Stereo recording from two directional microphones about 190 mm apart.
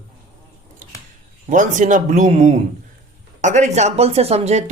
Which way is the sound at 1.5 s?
40° right (ahead or behind).